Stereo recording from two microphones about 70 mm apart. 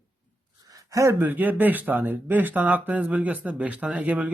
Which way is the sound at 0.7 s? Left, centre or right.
Right.